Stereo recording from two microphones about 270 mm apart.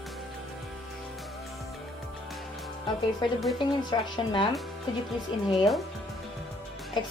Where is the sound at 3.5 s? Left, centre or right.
Centre.